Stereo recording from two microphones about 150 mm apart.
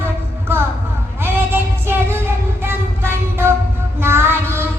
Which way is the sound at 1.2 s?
15° right (ahead or behind).